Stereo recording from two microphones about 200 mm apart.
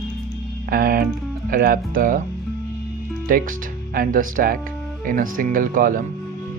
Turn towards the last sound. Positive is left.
turn(degrees=-45)  # may be behind; listen again after turning